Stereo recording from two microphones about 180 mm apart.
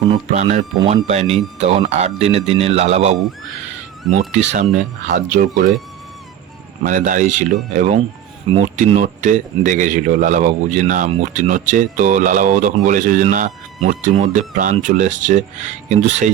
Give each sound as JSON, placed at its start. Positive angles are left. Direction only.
{"t": 0.3, "sound": "speech", "side_deg": -40}
{"t": 4.3, "sound": "a man's voice", "side_deg": -40}
{"t": 6.8, "sound": "a man's voice", "side_deg": -45}